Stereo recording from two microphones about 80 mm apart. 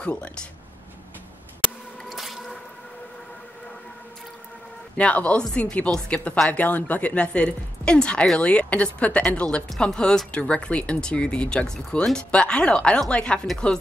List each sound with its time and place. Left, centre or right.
0.0 s speech: centre
2.0 s squish: centre
4.9 s speech: centre